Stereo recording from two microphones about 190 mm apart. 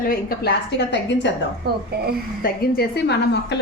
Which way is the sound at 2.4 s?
55° left (ahead or behind).